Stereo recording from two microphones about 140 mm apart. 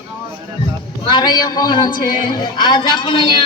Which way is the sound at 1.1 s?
30° left (ahead or behind).